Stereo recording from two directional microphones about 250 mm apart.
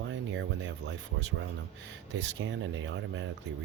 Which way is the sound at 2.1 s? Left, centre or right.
Right.